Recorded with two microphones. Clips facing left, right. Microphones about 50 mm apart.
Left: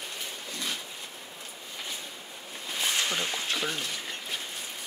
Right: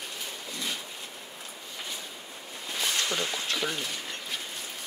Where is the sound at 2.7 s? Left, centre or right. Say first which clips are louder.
Even; centre.